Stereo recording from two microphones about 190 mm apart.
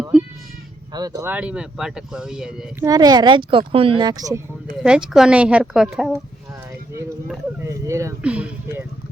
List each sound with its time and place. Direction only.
0.9 s speech: 20° right (ahead or behind); by 2.5 s 5° right (ahead or behind)
2.8 s speech: 20° right (ahead or behind)
4.8 s speech: 5° right (ahead or behind)
7.6 s speech: 15° right (ahead or behind)